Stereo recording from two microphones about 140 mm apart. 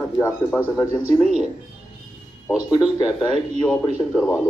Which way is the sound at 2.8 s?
5° right (ahead or behind).